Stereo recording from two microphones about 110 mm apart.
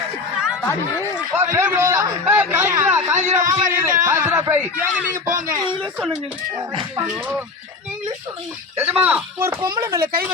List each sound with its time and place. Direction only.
0.6 s speech: 20° left (ahead or behind)
1.4 s a man's voice: 20° right (ahead or behind)
3.3 s a sound: 25° right (ahead or behind)
8.8 s speech: 15° right (ahead or behind)
9.6 s speech: 40° right (ahead or behind)
9.8 s speech: 20° right (ahead or behind)